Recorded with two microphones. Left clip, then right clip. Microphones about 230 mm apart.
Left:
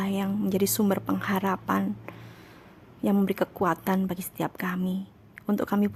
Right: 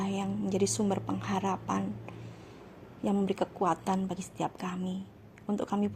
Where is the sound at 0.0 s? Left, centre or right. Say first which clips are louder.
Left 4 dB; left.